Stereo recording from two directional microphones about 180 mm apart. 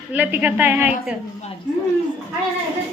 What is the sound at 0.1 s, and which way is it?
A woman's voice, 10° right (ahead or behind).